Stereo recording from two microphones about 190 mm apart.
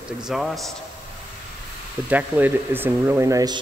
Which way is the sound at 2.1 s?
10° right (ahead or behind).